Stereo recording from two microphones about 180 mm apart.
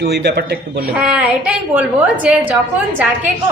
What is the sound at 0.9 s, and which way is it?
A woman's voice, 5° right (ahead or behind).